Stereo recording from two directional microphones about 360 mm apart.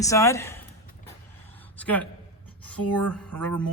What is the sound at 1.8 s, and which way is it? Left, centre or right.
Speech, centre.